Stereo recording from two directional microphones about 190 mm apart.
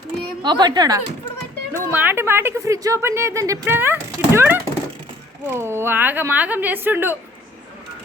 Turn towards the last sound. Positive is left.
turn(degrees=-10)  # may be behind; listen again after turning